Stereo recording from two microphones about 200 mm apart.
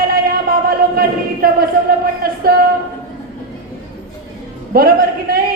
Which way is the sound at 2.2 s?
50° right (ahead or behind).